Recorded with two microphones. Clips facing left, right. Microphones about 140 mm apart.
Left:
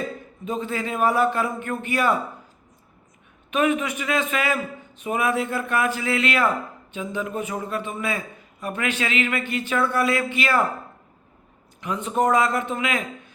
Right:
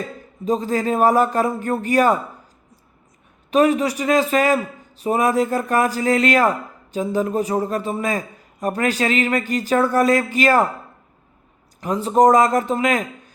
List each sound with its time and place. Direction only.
0.4 s a man's voice: 35° right (ahead or behind)
3.5 s a man's voice: 35° right (ahead or behind)
11.8 s a man's voice: 35° right (ahead or behind)